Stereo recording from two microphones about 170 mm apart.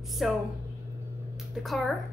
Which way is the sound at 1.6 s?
Centre (ahead or behind).